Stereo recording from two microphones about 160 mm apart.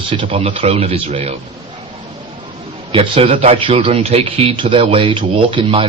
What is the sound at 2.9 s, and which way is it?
A man's voice, 35° right (ahead or behind).